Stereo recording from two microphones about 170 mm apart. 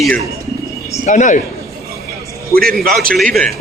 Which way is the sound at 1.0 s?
50° left (ahead or behind).